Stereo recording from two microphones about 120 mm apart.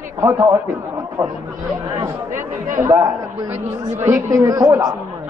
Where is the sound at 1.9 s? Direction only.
25° right (ahead or behind).